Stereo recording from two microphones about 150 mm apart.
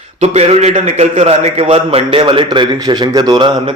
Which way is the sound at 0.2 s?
45° right (ahead or behind).